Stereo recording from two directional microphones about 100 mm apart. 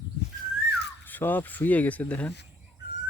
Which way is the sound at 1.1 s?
20° left (ahead or behind).